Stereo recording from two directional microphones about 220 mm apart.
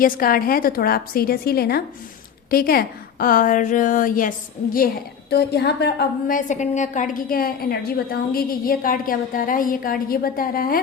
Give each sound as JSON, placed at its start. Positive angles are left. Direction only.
{"t": 0.0, "sound": "a woman's voice", "side_deg": 40}